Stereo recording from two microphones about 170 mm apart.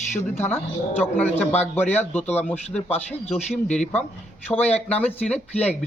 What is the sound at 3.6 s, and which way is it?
Speech, 5° left (ahead or behind).